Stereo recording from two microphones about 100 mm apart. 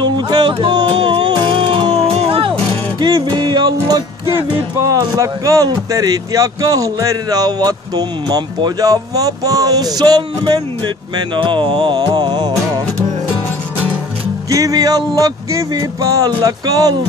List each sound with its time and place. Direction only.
0.0 s music: 50° right (ahead or behind); by 2.5 s 70° right (ahead or behind)
3.0 s music: 45° right (ahead or behind)
4.7 s speech: 35° right (ahead or behind)
11.3 s a sound: 55° right (ahead or behind)
12.1 s music: 50° right (ahead or behind)
14.5 s speech: 35° right (ahead or behind)